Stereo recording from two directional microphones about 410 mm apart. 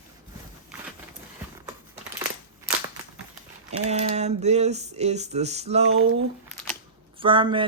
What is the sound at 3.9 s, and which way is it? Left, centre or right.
Speech, centre.